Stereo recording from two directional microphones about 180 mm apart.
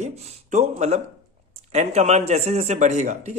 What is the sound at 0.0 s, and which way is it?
Speech, 40° right (ahead or behind).